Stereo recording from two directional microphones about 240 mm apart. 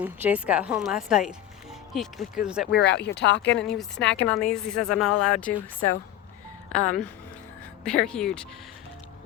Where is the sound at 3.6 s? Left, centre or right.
Centre.